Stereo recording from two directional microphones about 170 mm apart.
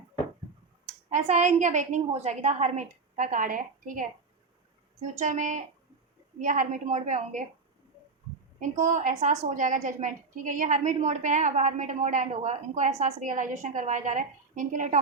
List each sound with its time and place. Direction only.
1.1 s a woman's voice: 45° right (ahead or behind)
5.2 s a woman's voice: 45° right (ahead or behind)
8.5 s a woman's voice: 45° right (ahead or behind)